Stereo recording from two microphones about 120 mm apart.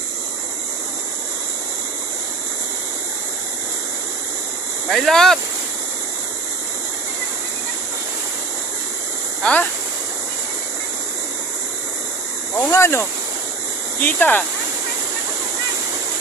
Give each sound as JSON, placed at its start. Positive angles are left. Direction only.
{"t": 4.8, "sound": "speech", "side_deg": 0}
{"t": 9.4, "sound": "speech", "side_deg": 10}
{"t": 12.5, "sound": "speech", "side_deg": 20}
{"t": 14.0, "sound": "speech", "side_deg": 15}